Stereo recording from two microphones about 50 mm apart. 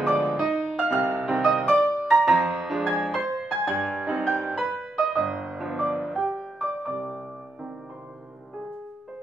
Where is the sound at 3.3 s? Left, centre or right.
Centre.